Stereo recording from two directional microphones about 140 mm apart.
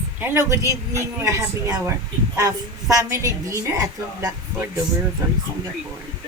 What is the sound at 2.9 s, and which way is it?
A woman's voice, 20° right (ahead or behind).